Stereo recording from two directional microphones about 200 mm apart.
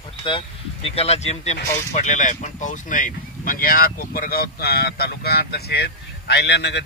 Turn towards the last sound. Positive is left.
turn(degrees=60)  # may be behind; listen again after turning